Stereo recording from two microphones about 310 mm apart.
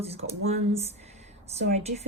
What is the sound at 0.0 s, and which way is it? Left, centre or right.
Speech, centre.